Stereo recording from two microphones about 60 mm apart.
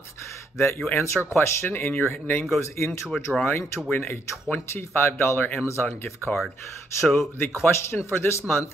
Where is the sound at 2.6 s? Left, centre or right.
Left.